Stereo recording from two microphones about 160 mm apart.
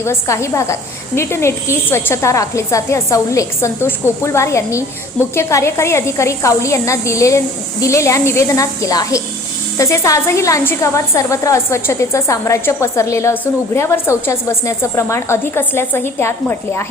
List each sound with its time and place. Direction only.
0.0 s a woman's voice: 15° left (ahead or behind)